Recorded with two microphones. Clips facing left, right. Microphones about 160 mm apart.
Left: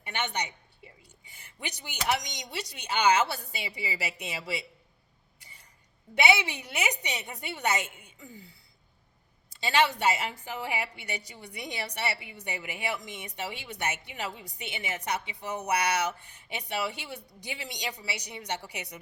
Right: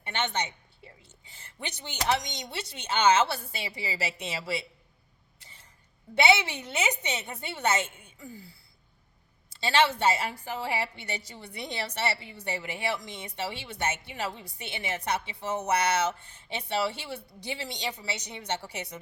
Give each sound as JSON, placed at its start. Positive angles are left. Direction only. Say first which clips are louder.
{"t": 0.1, "sound": "speech", "louder": "right 2 dB", "side_deg": 15}
{"t": 5.4, "sound": "a sound", "louder": "right 1 dB", "side_deg": 15}
{"t": 6.1, "sound": "a woman's voice", "louder": "right 2 dB", "side_deg": 15}
{"t": 9.6, "sound": "speech", "louder": "right 1 dB", "side_deg": 15}